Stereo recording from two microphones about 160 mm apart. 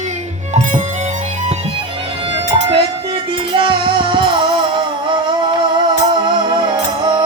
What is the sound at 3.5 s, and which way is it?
Music, 30° right (ahead or behind).